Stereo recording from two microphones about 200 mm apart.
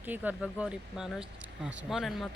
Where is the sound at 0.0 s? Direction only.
10° right (ahead or behind).